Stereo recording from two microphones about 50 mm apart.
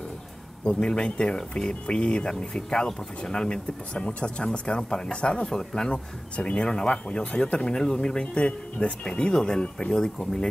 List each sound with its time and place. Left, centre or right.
0.7 s speech: centre